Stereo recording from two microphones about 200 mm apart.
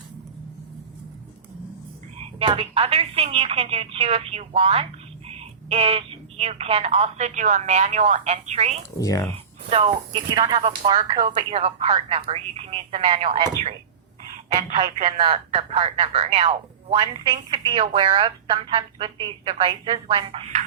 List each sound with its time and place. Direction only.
2.1 s a woman's voice: 30° right (ahead or behind)
9.0 s speech: 15° left (ahead or behind)
9.6 s speech: 30° right (ahead or behind)
14.8 s a woman's voice: 35° right (ahead or behind)